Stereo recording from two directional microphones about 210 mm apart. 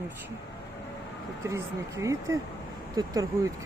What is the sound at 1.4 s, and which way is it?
Speech, 15° right (ahead or behind).